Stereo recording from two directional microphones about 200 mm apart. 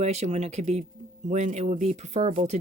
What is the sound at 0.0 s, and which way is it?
Speech, 35° right (ahead or behind).